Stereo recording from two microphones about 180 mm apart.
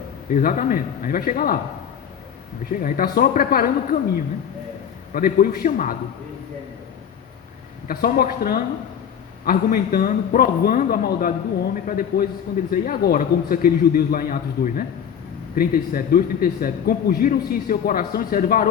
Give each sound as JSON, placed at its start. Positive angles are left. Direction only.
{"t": 0.3, "sound": "speech", "side_deg": 50}
{"t": 2.7, "sound": "speech", "side_deg": 50}
{"t": 5.1, "sound": "speech", "side_deg": 55}
{"t": 7.9, "sound": "a man's voice", "side_deg": 55}